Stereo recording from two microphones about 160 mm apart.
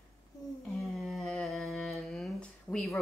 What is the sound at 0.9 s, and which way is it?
Humming, centre (ahead or behind).